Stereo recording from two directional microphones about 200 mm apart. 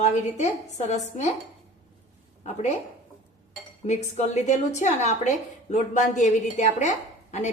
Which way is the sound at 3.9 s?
35° left (ahead or behind).